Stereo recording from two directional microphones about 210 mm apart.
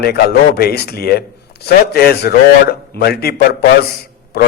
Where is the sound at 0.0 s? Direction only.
50° left (ahead or behind).